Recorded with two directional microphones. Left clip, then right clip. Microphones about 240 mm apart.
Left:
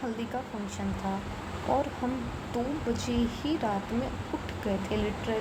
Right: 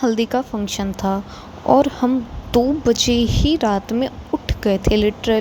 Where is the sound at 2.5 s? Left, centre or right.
Right.